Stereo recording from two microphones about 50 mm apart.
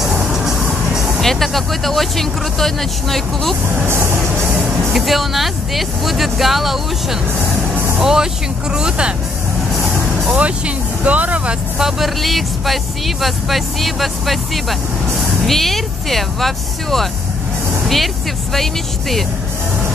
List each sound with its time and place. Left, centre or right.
0.0 s vehicle: centre
1.2 s speech: centre
3.8 s music: right
4.9 s speech: centre
10.3 s speech: right
11.8 s speech: centre